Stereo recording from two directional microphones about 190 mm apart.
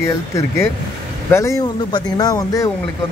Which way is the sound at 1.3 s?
15° left (ahead or behind).